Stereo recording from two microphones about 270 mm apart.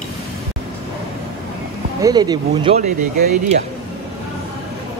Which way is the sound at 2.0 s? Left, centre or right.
Centre.